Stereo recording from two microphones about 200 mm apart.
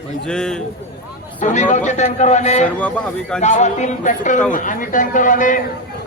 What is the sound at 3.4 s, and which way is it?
A man's voice, 35° left (ahead or behind).